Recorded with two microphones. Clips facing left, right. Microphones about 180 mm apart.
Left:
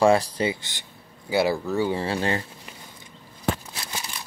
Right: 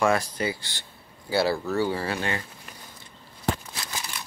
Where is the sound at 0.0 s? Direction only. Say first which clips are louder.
Left 5 dB; 30° left (ahead or behind).